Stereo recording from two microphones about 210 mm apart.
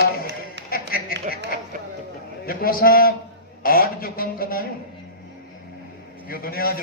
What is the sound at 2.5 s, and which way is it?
A man's voice, 45° left (ahead or behind).